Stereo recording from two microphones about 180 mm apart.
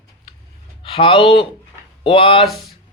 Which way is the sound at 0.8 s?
30° left (ahead or behind).